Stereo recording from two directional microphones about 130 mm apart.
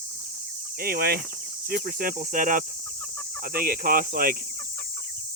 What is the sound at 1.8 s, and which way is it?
Speech, 90° right.